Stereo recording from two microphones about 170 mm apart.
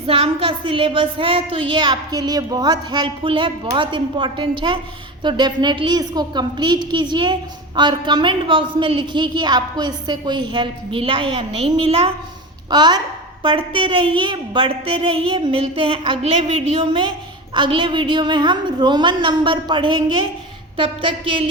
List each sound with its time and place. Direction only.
0.1 s a woman's voice: 35° right (ahead or behind)